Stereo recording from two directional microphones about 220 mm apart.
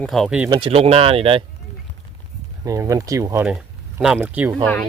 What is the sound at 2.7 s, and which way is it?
Speech, 15° right (ahead or behind).